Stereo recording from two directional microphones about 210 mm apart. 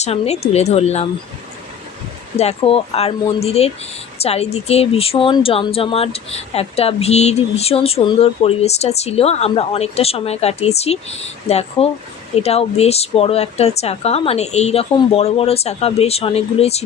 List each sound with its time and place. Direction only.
0.0 s speech: 30° left (ahead or behind)
2.3 s speech: 30° left (ahead or behind)